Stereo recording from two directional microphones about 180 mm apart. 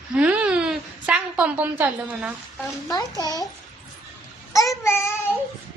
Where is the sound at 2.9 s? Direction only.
20° left (ahead or behind).